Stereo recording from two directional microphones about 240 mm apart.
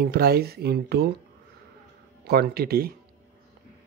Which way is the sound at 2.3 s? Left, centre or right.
Right.